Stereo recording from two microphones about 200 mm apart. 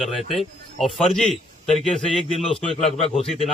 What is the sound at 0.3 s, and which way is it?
A man's voice, centre (ahead or behind).